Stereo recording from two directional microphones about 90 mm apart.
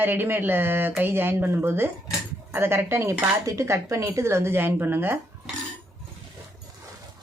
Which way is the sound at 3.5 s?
35° right (ahead or behind).